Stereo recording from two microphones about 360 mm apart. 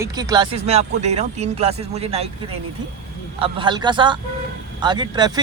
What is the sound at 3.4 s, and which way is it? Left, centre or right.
Speech, centre.